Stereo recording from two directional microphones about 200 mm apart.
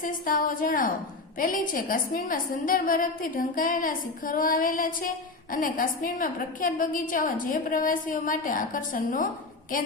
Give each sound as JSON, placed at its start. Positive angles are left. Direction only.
{"t": 0.0, "sound": "a woman's voice", "side_deg": 45}